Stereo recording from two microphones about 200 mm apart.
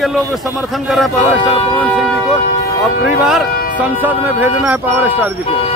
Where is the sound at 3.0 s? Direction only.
5° right (ahead or behind).